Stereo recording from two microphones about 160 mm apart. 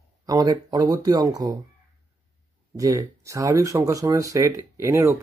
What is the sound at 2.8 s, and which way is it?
Speech, 20° right (ahead or behind).